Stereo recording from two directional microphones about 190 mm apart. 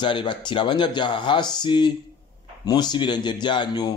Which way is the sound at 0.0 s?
25° left (ahead or behind).